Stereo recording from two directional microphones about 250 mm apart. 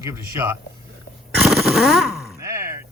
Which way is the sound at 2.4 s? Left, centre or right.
Centre.